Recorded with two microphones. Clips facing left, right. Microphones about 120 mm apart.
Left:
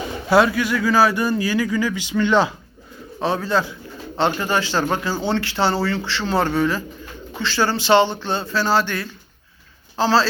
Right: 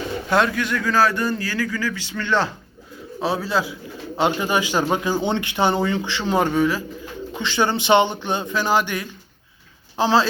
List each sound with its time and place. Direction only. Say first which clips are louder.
0.3 s speech: left 4 dB; 5° left (ahead or behind)
3.2 s a man's voice: left 2 dB; 5° right (ahead or behind)